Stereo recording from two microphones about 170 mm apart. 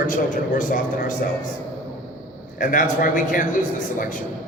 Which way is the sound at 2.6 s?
50° left (ahead or behind).